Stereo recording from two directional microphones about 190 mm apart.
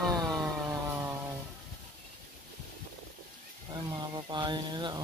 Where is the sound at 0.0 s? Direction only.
Centre (ahead or behind).